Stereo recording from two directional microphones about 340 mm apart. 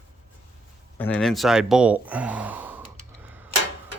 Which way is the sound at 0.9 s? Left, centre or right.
Centre.